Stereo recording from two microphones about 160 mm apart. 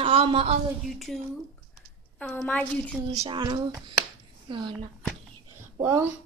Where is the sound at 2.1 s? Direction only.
10° left (ahead or behind).